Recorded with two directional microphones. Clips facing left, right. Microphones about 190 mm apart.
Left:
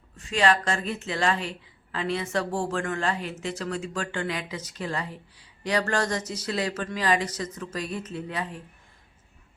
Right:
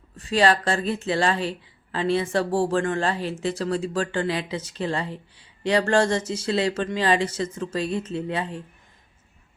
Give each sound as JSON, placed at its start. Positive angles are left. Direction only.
{"t": 0.2, "sound": "speech", "side_deg": -35}